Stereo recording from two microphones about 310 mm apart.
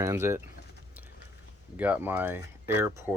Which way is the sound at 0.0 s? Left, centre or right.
Centre.